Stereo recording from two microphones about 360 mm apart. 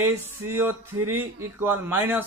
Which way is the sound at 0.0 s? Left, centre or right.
Centre.